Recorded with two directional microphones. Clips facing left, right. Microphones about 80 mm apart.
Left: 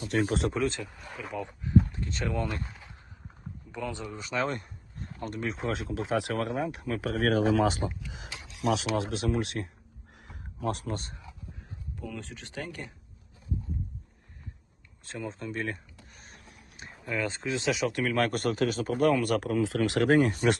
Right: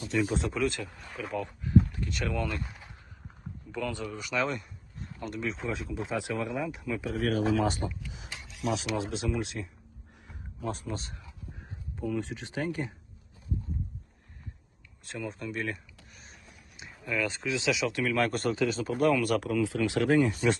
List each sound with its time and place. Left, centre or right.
0.5 s speech: left
0.9 s speech: centre
1.5 s speech: left
3.7 s speech: centre; by 5.5 s left
5.5 s speech: left
6.7 s speech: left
10.2 s a sound: left
12.0 s speech: centre
15.0 s a sound: left
17.1 s speech: left